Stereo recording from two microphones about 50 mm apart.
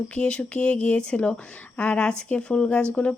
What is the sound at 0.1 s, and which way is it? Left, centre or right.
Speech, left.